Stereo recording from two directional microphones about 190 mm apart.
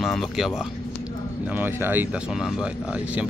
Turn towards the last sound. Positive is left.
turn(degrees=-5)  # may be behind; listen again after turning